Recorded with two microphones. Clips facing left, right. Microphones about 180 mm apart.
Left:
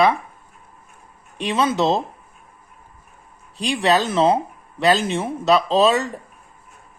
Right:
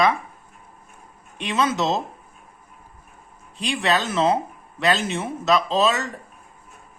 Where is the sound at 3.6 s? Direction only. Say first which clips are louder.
Left 4 dB; 35° left (ahead or behind).